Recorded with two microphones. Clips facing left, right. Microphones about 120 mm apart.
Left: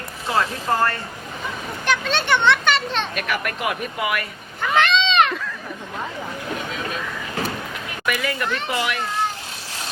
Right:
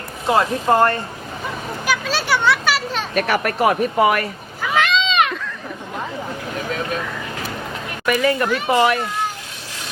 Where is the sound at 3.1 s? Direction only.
40° right (ahead or behind).